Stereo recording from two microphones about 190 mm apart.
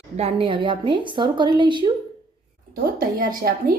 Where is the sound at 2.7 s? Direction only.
45° right (ahead or behind).